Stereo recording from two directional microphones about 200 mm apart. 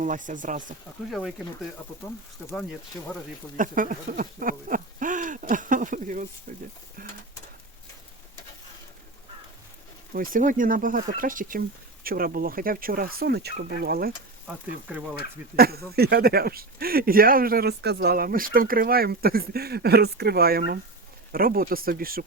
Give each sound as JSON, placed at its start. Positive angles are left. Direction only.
{"t": 0.0, "sound": "speech", "side_deg": -40}
{"t": 3.6, "sound": "speech", "side_deg": -40}
{"t": 10.1, "sound": "speech", "side_deg": -45}
{"t": 15.5, "sound": "speech", "side_deg": -50}